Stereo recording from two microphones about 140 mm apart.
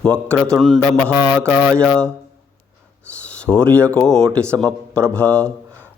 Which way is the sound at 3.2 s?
10° left (ahead or behind).